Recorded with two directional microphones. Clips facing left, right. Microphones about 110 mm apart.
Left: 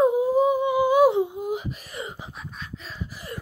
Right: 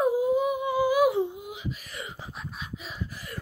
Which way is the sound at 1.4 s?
45° left (ahead or behind).